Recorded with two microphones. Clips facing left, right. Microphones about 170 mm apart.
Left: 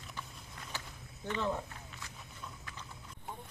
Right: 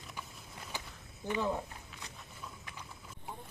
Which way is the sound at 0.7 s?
15° right (ahead or behind).